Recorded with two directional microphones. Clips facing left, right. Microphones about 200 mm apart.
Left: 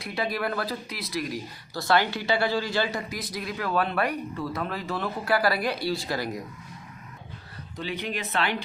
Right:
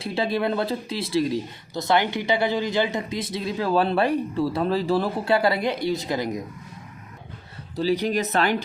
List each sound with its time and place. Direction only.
0.0 s speech: 30° right (ahead or behind)
7.8 s speech: 35° right (ahead or behind)